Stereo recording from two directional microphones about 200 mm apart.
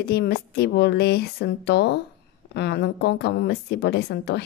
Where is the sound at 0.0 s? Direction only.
50° left (ahead or behind).